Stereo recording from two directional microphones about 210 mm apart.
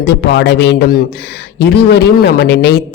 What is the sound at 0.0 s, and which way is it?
Speech, 55° left (ahead or behind).